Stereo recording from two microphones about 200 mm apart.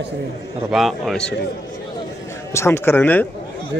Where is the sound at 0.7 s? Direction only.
Centre (ahead or behind).